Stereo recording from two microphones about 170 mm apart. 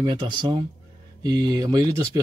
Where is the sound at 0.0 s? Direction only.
25° right (ahead or behind).